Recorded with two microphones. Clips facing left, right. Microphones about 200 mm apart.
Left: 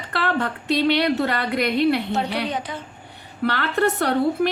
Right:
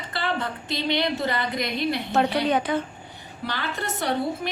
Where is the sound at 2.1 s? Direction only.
60° right (ahead or behind).